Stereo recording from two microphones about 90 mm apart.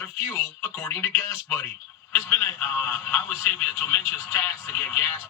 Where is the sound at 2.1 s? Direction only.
25° left (ahead or behind).